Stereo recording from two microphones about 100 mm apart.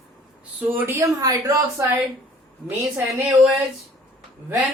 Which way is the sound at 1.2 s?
35° right (ahead or behind).